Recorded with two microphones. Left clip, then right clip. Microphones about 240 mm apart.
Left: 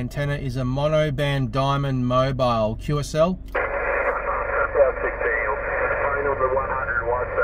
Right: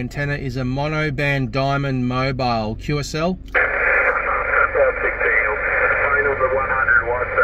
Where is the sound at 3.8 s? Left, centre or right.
Right.